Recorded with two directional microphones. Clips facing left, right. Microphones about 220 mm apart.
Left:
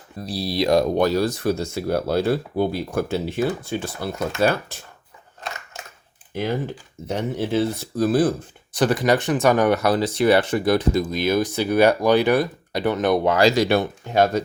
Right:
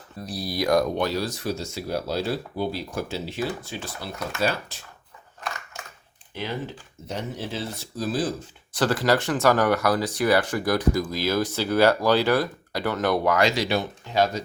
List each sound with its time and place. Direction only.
0.3 s speech: 25° left (ahead or behind)
0.9 s speech: 45° left (ahead or behind)
6.3 s speech: 50° left (ahead or behind)
8.7 s speech: 15° left (ahead or behind)
13.6 s speech: 55° left (ahead or behind)